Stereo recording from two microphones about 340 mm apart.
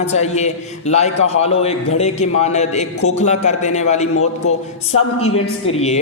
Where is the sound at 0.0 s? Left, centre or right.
Centre.